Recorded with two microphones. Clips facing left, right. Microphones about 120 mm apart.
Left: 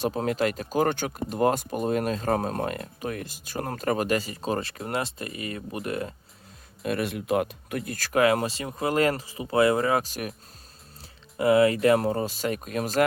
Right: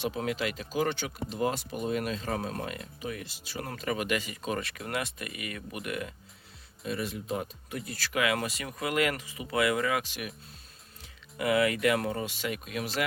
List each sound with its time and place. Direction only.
0.0 s speech: 40° left (ahead or behind)
6.8 s speech: 65° left (ahead or behind); by 8.4 s 40° left (ahead or behind)
8.4 s speech: 30° left (ahead or behind)
11.3 s speech: 30° left (ahead or behind)